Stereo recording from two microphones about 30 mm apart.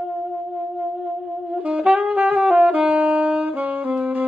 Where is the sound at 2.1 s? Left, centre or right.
Right.